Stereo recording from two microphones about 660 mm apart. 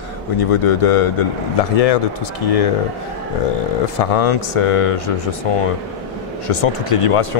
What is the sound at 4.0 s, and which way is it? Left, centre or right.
Speech, left.